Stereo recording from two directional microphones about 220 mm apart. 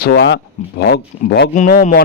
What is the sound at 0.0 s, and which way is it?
A man's voice, 50° left (ahead or behind).